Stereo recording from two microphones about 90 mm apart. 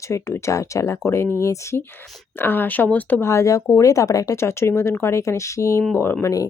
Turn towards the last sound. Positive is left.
turn(degrees=25)  # may be behind; listen again after turning